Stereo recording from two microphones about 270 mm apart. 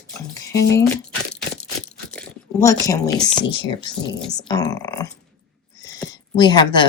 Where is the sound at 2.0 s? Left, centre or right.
Centre.